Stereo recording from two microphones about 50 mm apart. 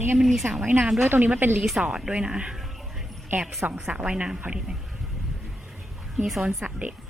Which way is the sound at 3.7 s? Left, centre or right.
Right.